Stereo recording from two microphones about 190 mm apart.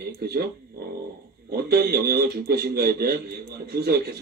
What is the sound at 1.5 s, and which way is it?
A man's voice, 55° right (ahead or behind).